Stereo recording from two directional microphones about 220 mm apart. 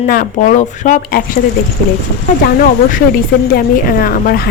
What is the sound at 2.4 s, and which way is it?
Speech, 35° left (ahead or behind).